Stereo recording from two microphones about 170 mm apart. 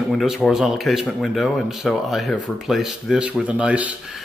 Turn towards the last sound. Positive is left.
turn(degrees=-5)  # may be behind; listen again after turning